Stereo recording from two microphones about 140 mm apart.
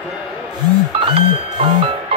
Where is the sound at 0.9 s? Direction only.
40° right (ahead or behind).